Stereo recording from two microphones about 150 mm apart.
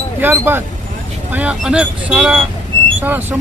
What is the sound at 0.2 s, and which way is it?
Speech, 15° right (ahead or behind).